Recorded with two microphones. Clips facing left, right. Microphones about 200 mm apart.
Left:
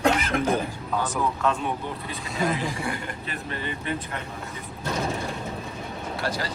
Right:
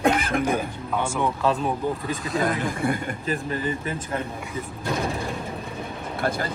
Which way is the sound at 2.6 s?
55° right (ahead or behind).